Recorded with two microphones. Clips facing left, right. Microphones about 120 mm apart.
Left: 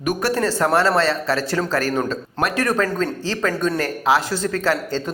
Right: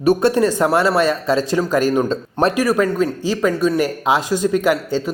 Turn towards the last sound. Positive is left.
turn(degrees=-10)  # may be behind; listen again after turning